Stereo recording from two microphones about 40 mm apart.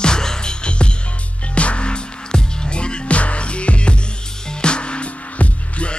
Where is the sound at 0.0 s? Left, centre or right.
Centre.